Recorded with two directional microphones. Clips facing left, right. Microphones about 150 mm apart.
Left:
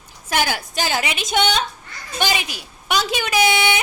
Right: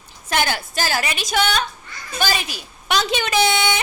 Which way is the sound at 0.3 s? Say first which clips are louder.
Even; 10° left (ahead or behind).